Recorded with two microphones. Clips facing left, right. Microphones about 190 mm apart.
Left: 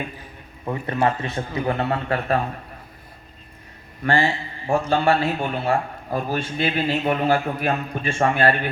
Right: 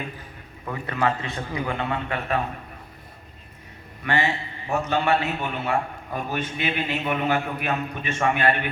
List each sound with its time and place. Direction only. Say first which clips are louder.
0.6 s a man's voice: left 3 dB; 30° left (ahead or behind)
4.0 s a man's voice: left 4 dB; 35° left (ahead or behind)